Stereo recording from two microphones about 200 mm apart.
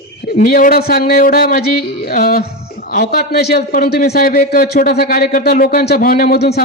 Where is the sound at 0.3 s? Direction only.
45° left (ahead or behind).